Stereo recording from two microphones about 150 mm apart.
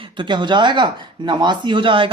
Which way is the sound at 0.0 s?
30° right (ahead or behind).